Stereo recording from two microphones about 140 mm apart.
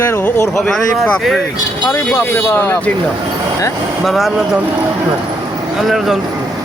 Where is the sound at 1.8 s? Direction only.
15° left (ahead or behind).